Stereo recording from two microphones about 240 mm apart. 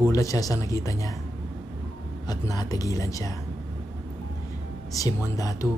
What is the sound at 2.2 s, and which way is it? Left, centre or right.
Speech, centre.